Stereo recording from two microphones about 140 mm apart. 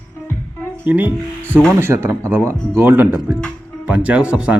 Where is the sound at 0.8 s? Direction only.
15° right (ahead or behind).